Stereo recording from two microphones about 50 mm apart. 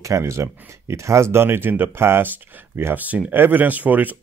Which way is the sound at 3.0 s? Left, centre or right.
Right.